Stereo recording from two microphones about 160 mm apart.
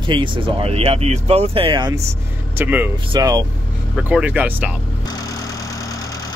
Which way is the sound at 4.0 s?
10° right (ahead or behind).